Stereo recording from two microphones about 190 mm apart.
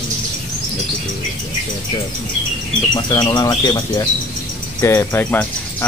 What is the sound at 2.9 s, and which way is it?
Speech, 20° left (ahead or behind).